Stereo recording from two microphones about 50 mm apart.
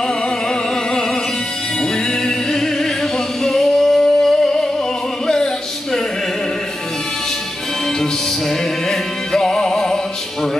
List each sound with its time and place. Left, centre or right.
2.2 s singing: centre
5.2 s music: centre
9.3 s music: centre